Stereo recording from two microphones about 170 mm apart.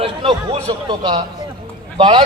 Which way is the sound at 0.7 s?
25° right (ahead or behind).